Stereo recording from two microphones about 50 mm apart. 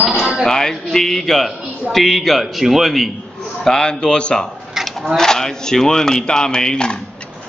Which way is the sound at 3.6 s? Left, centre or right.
Centre.